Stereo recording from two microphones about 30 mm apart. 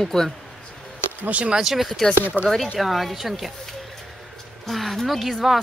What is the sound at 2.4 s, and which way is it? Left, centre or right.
Speech, left.